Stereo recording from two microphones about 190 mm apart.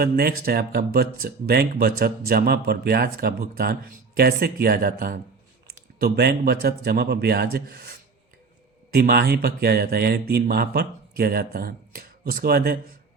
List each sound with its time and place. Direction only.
0.0 s speech: 55° right (ahead or behind)